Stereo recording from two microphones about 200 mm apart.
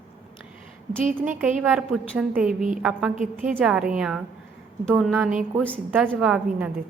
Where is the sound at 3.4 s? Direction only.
5° right (ahead or behind).